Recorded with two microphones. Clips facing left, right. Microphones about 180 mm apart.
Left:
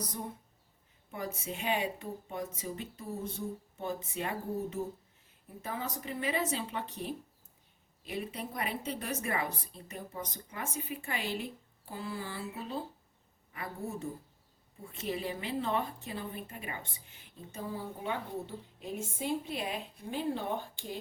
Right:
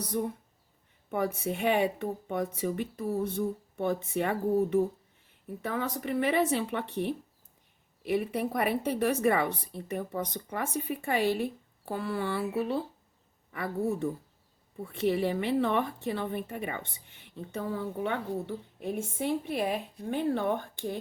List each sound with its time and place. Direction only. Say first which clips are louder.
0.1 s a woman's voice: right 10 dB; 65° right (ahead or behind)